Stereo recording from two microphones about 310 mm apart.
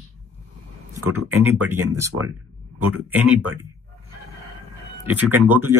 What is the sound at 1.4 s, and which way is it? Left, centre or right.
Speech, centre.